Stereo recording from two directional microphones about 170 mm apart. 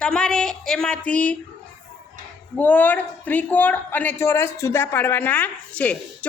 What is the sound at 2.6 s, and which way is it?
A woman's voice, 10° left (ahead or behind).